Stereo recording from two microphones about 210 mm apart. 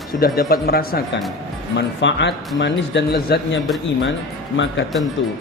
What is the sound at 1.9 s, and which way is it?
Speech, 55° left (ahead or behind).